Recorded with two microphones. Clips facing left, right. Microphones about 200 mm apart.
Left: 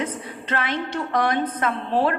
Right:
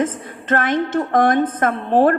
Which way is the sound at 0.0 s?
50° right (ahead or behind).